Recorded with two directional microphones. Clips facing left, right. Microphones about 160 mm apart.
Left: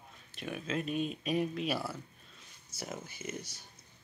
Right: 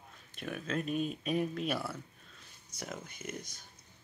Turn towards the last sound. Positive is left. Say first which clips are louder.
# left 1 dB
turn(degrees=5)  # may be behind; listen again after turning